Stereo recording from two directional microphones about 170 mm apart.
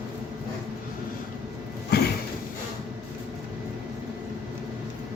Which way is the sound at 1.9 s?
70° left (ahead or behind).